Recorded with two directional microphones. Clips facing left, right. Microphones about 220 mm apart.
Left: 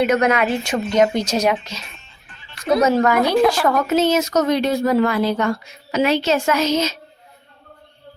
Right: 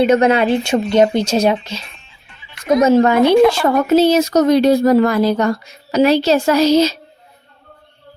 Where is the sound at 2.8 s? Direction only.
30° right (ahead or behind).